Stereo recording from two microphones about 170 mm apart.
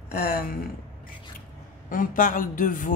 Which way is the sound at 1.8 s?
55° left (ahead or behind).